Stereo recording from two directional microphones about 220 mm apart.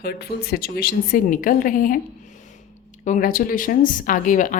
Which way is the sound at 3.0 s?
40° left (ahead or behind).